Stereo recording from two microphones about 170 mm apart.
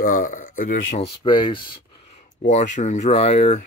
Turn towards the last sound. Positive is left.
turn(degrees=40)  # may be behind; listen again after turning